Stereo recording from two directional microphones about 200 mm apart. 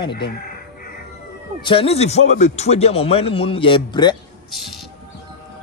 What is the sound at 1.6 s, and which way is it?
Speech, 25° left (ahead or behind).